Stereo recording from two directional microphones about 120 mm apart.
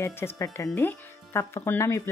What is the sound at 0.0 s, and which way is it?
Speech, 20° left (ahead or behind).